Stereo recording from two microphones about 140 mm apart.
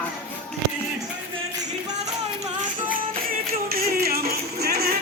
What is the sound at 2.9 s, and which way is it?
Music, 85° right.